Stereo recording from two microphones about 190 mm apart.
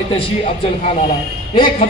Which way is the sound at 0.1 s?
30° left (ahead or behind).